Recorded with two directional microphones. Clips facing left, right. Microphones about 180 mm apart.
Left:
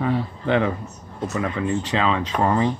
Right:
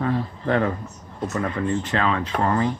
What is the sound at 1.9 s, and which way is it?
Speech, 15° left (ahead or behind).